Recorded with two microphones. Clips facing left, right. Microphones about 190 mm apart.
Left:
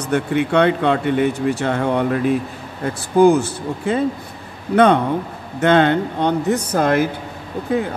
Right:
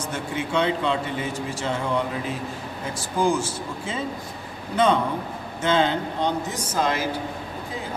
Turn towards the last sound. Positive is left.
turn(degrees=65)  # may be behind; listen again after turning